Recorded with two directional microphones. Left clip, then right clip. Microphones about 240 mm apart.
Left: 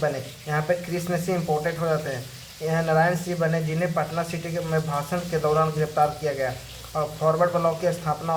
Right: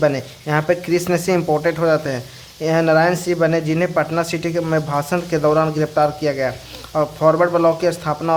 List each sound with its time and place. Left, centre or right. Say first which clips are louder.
0.0 s speech: right 8 dB; right